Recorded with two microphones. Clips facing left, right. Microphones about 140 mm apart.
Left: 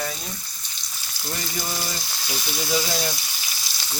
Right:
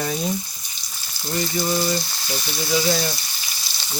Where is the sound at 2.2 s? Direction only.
5° left (ahead or behind).